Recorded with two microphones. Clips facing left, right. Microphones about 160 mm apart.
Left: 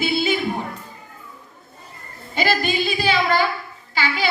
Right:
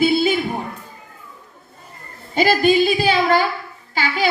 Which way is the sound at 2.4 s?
45° right (ahead or behind).